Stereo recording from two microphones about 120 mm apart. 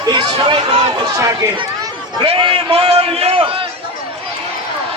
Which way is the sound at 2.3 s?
45° right (ahead or behind).